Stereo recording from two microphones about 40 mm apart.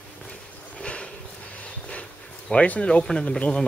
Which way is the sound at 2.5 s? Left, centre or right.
Left.